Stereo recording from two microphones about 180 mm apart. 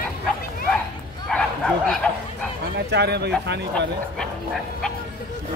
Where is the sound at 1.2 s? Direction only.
5° left (ahead or behind).